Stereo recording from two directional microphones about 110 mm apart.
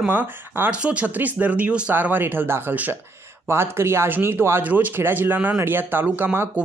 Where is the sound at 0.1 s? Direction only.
15° right (ahead or behind).